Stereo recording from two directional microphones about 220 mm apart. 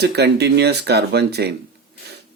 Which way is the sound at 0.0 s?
50° right (ahead or behind).